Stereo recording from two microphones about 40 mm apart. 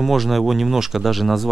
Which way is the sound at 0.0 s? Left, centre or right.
Centre.